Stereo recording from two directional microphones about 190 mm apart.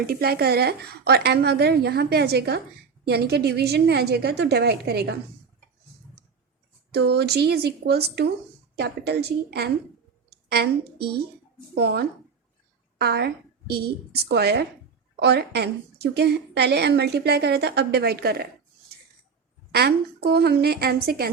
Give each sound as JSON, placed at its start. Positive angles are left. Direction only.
{"t": 0.0, "sound": "a woman's voice", "side_deg": -55}
{"t": 6.9, "sound": "a woman's voice", "side_deg": -60}
{"t": 10.2, "sound": "a sound", "side_deg": -55}
{"t": 11.7, "sound": "a woman's voice", "side_deg": -60}
{"t": 19.7, "sound": "a woman's voice", "side_deg": -55}